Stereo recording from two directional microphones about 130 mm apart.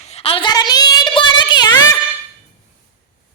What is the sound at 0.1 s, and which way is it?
Child singing, 50° left (ahead or behind).